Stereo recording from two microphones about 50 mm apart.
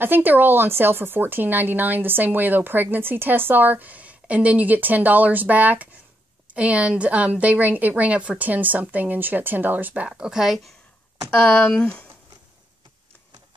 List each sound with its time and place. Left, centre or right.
0.0 s speech: right
10.0 s speech: centre
11.2 s speech: left
11.7 s speech: left